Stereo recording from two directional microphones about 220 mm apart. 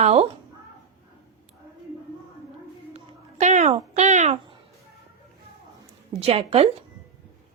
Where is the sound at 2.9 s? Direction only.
30° right (ahead or behind).